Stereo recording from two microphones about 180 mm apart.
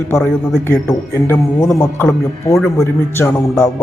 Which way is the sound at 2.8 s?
20° left (ahead or behind).